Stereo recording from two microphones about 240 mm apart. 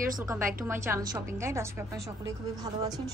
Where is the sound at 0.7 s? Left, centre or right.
Centre.